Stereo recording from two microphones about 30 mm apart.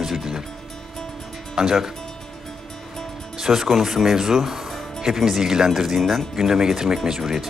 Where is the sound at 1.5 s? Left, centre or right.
Centre.